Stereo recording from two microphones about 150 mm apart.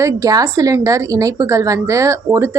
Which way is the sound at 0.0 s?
25° right (ahead or behind).